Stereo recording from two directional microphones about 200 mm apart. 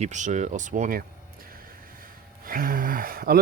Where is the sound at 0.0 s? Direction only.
35° right (ahead or behind).